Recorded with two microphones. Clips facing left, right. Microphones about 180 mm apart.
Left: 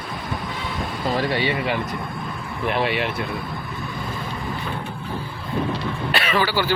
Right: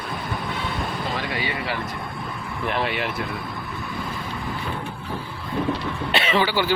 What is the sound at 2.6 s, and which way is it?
Speech, centre (ahead or behind).